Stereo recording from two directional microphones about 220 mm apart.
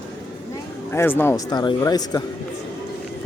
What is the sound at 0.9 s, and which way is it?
Speech, 10° left (ahead or behind).